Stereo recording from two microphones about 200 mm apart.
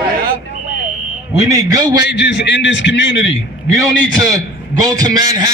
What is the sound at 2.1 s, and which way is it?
A man's voice, 60° left (ahead or behind).